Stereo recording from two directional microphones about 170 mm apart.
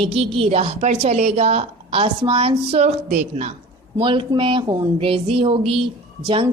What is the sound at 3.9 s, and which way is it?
A woman's voice, 30° right (ahead or behind).